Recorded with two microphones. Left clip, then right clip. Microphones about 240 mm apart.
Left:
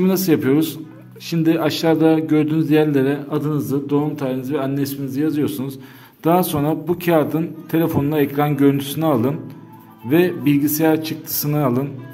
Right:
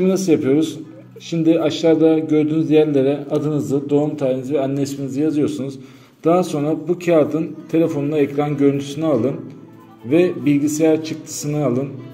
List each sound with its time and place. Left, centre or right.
0.0 s a man's voice: left